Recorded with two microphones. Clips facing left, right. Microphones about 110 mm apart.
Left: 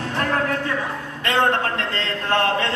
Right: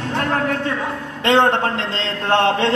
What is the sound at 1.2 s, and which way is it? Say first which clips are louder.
A man's voice: right 5 dB; 20° right (ahead or behind).